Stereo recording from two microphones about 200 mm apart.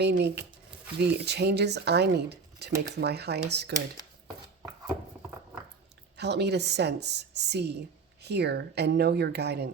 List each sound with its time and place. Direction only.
0.0 s speech: 55° right (ahead or behind)
6.1 s speech: 55° right (ahead or behind)